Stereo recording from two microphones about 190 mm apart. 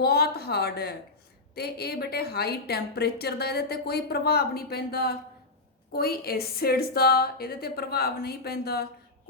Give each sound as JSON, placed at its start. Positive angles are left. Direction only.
{"t": 0.0, "sound": "a woman's voice", "side_deg": 55}